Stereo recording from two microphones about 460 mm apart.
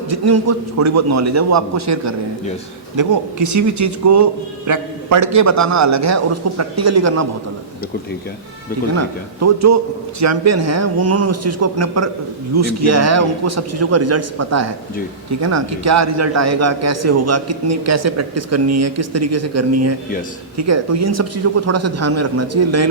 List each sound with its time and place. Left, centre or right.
0.1 s a man's voice: right
9.0 s a man's voice: right